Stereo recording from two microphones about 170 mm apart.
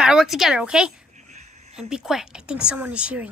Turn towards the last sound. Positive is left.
turn(degrees=-5)  # may be behind; listen again after turning